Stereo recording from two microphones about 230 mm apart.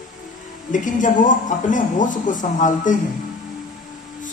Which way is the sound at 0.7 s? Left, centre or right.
Left.